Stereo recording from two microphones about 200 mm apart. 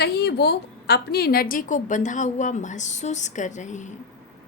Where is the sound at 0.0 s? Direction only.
55° left (ahead or behind); by 3.9 s 35° left (ahead or behind).